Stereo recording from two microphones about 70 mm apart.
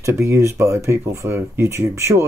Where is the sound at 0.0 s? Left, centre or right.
Right.